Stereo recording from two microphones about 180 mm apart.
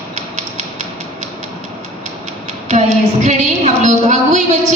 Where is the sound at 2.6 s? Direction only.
40° right (ahead or behind).